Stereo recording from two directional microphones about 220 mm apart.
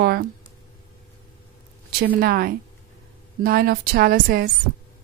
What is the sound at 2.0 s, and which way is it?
A woman's voice, 45° right (ahead or behind).